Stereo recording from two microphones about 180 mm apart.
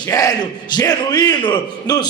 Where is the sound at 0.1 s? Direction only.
20° left (ahead or behind).